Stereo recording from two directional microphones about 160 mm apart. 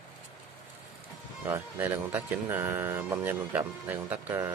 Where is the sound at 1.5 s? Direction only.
15° right (ahead or behind).